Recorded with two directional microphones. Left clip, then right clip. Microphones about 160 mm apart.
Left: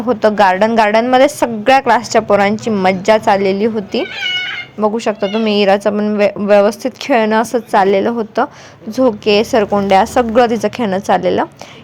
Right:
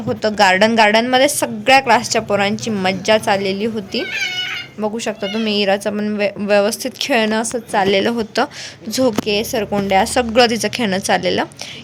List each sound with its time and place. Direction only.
0.1 s a woman's voice: centre (ahead or behind)